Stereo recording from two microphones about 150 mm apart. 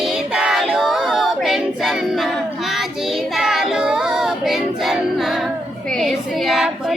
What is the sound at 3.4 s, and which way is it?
Child singing, 5° right (ahead or behind).